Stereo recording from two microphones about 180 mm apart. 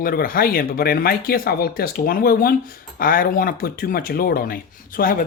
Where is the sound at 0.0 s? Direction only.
50° left (ahead or behind).